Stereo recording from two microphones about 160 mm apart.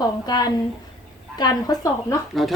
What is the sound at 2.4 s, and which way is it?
Speech, centre (ahead or behind).